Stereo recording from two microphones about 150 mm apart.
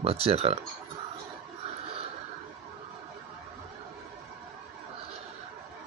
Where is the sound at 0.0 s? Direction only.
40° right (ahead or behind).